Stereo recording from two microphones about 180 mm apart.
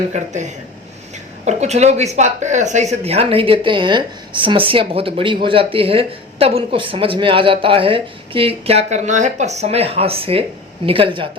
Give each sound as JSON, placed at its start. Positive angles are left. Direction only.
{"t": 0.1, "sound": "speech", "side_deg": -40}